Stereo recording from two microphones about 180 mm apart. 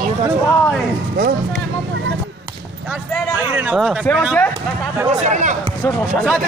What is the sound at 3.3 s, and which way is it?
Speech, 10° right (ahead or behind).